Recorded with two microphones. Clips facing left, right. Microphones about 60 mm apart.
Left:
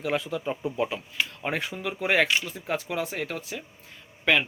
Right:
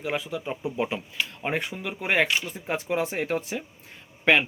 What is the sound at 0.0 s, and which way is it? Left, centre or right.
Speech, centre.